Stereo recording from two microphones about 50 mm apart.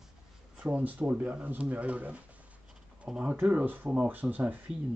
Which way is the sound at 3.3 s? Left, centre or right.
Right.